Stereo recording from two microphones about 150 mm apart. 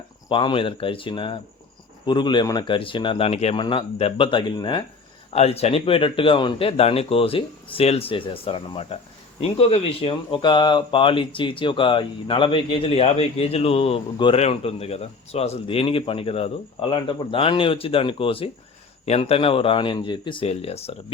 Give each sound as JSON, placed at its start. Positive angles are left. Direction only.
{"t": 0.3, "sound": "speech", "side_deg": 35}
{"t": 5.3, "sound": "speech", "side_deg": 45}